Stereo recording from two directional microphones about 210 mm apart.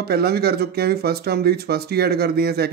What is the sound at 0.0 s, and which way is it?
Speech, 50° right (ahead or behind).